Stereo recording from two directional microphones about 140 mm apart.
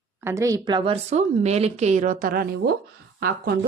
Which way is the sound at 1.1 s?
50° right (ahead or behind).